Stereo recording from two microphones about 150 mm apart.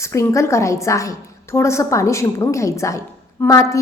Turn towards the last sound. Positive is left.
turn(degrees=20)  # may be behind; listen again after turning